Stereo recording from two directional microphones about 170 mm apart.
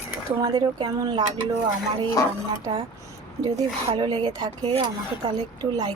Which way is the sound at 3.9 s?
25° right (ahead or behind).